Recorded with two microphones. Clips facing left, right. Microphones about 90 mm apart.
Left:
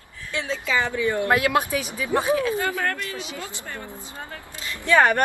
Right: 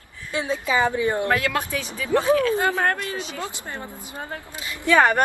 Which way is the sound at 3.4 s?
25° right (ahead or behind).